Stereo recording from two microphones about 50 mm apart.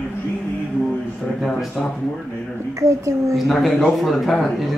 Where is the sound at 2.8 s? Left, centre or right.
Right.